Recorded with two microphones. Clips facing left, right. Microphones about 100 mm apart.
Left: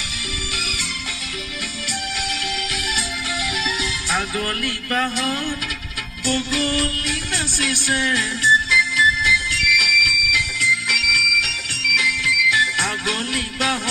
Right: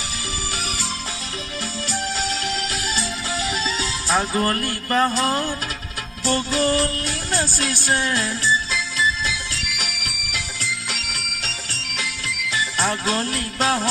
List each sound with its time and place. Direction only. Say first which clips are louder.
3.4 s music: even; 30° right (ahead or behind)